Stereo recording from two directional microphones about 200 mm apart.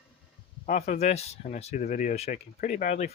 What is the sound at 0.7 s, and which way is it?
Speech, 35° left (ahead or behind).